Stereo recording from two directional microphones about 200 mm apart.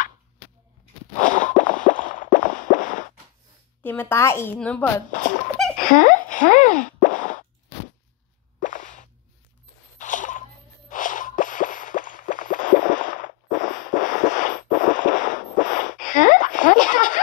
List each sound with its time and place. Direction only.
1.1 s plop: 40° left (ahead or behind)
3.8 s a woman's voice: 10° left (ahead or behind)
5.1 s speech: 40° left (ahead or behind)
5.9 s plop: 40° left (ahead or behind)
8.5 s plop: 40° left (ahead or behind)
9.9 s a sound: 40° left (ahead or behind)